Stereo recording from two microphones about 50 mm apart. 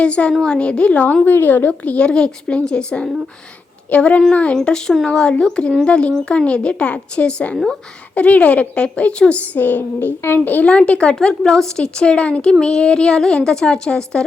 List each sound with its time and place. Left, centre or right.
0.0 s a woman's voice: left
1.0 s a woman's voice: left
2.0 s speech: centre
3.8 s a woman's voice: left
4.5 s a woman's voice: centre
7.5 s a woman's voice: centre
8.1 s a woman's voice: left
9.4 s a woman's voice: left
10.7 s a woman's voice: left